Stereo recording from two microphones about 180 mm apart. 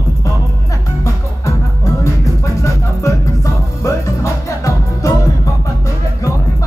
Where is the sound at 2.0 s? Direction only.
15° left (ahead or behind).